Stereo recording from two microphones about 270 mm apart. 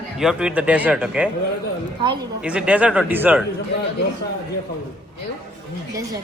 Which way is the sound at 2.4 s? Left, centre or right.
Centre.